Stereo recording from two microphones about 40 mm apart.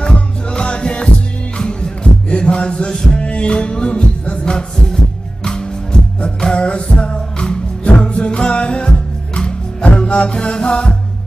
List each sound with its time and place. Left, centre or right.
0.0 s music: left
3.2 s music: left